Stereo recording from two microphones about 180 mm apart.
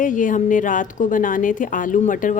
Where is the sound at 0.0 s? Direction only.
45° left (ahead or behind).